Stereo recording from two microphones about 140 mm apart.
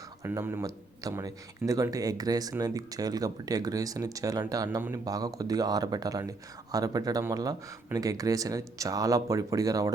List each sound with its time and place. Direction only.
0.2 s speech: 15° right (ahead or behind)